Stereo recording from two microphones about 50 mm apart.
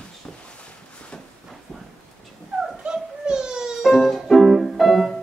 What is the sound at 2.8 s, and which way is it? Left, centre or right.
Music, centre.